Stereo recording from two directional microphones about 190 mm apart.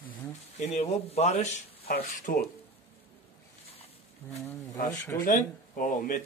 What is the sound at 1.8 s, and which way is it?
Speech, 50° left (ahead or behind).